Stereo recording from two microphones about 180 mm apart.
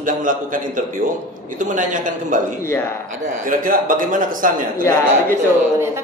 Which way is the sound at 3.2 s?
50° right (ahead or behind).